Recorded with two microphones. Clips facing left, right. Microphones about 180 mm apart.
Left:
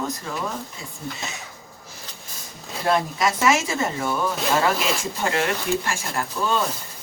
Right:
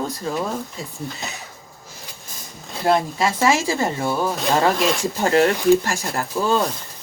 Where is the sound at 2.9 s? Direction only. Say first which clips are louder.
Right 3 dB; 30° right (ahead or behind).